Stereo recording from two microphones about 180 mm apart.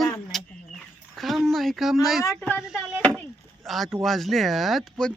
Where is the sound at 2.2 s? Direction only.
10° left (ahead or behind).